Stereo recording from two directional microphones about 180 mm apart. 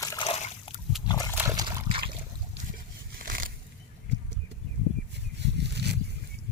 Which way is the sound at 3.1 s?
55° right (ahead or behind).